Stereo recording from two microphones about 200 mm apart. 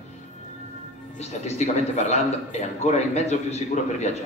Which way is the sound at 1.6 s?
35° left (ahead or behind).